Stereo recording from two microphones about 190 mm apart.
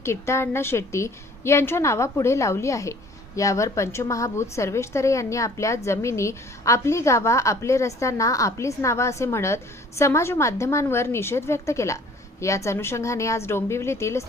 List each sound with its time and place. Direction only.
0.0 s a woman's voice: 15° left (ahead or behind)